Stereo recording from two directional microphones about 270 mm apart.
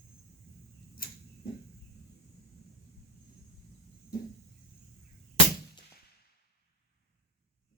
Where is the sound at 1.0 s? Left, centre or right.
Left.